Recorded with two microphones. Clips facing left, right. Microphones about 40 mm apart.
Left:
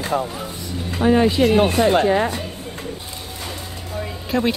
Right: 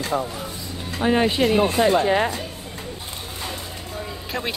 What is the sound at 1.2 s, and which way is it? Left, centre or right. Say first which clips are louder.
Speech: left 3 dB; right.